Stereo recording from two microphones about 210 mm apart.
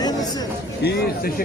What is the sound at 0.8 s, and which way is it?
Speech, 50° left (ahead or behind).